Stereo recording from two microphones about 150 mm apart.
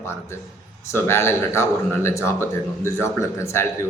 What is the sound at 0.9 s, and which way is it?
A man's voice, 15° left (ahead or behind).